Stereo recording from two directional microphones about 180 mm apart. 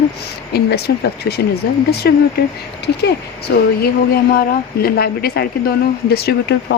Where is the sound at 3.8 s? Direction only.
55° left (ahead or behind).